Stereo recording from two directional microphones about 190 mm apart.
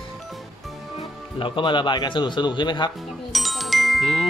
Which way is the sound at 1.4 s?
25° left (ahead or behind).